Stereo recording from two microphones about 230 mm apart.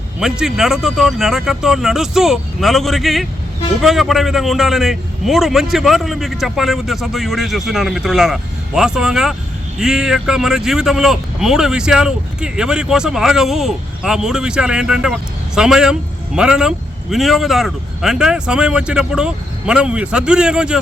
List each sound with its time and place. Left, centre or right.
0.2 s speech: centre